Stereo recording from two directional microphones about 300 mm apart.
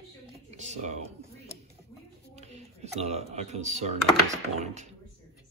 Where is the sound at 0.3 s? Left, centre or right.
Right.